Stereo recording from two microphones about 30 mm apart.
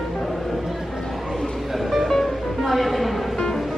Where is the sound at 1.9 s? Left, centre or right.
Centre.